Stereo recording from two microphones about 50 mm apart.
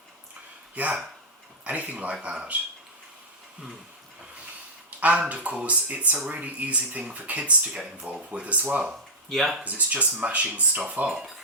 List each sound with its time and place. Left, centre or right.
0.8 s speech: right
4.9 s a sound: right
5.3 s speech: right
9.3 s speech: centre
9.6 s speech: right